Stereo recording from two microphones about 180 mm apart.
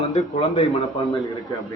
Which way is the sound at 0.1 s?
40° left (ahead or behind).